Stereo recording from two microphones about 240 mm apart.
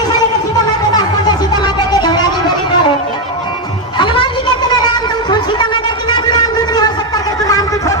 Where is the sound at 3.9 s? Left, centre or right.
Centre.